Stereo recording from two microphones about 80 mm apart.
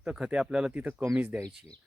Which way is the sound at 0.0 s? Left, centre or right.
Centre.